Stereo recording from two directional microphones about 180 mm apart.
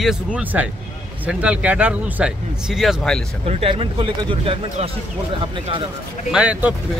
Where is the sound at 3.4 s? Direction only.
35° right (ahead or behind).